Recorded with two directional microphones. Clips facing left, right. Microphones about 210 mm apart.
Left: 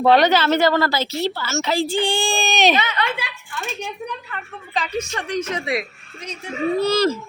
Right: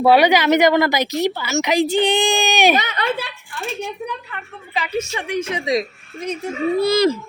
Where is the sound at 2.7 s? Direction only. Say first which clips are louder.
Right 2 dB; 40° right (ahead or behind).